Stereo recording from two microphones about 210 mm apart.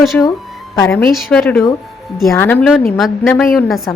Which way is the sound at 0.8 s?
15° left (ahead or behind).